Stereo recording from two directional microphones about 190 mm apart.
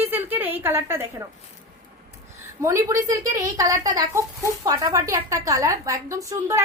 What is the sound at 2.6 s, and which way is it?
A woman's voice, 15° right (ahead or behind).